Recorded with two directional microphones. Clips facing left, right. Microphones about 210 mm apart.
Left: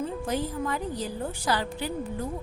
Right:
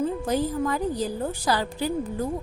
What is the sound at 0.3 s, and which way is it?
A woman's voice, 40° right (ahead or behind).